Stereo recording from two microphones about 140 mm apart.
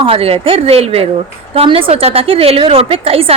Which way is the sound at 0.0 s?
45° right (ahead or behind).